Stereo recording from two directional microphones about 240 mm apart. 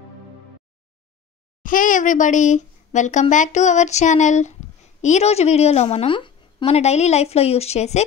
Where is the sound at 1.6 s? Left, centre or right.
Left.